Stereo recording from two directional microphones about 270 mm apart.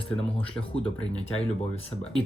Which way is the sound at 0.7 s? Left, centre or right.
Left.